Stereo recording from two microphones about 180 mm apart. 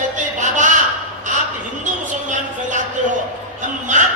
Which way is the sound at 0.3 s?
45° right (ahead or behind).